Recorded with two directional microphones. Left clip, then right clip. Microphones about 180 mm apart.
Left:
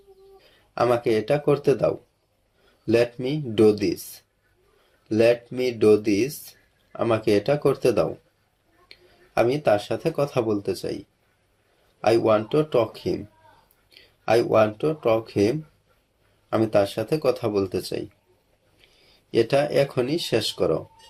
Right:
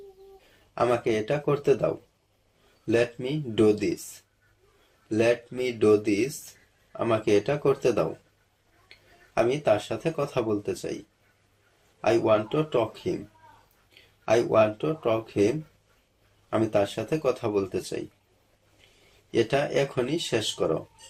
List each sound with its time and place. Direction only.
0.7 s speech: 30° left (ahead or behind)
5.0 s speech: 35° left (ahead or behind)
12.0 s speech: 35° left (ahead or behind)
19.3 s speech: 30° left (ahead or behind)